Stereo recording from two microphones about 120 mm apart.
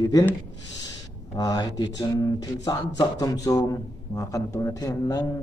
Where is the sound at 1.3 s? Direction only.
35° left (ahead or behind).